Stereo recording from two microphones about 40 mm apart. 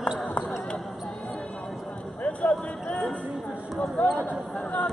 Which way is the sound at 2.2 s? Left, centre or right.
Left.